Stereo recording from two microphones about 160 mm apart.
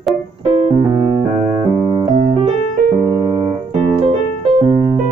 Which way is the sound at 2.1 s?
30° right (ahead or behind).